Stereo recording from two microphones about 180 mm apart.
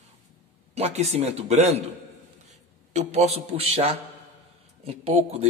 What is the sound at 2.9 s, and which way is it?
A man's voice, 35° right (ahead or behind).